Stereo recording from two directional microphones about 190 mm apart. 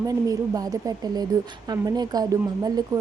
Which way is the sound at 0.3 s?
20° right (ahead or behind).